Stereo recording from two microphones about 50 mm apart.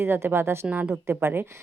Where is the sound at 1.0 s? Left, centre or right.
Right.